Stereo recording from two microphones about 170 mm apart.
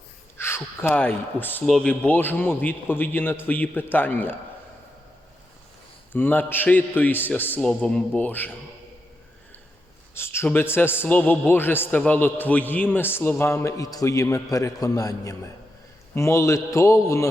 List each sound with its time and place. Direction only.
0.3 s speech: 15° left (ahead or behind)
6.1 s speech: 10° left (ahead or behind)
10.2 s speech: 15° left (ahead or behind)